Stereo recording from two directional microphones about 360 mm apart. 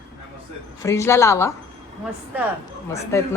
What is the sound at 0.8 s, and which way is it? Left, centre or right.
Speech, centre.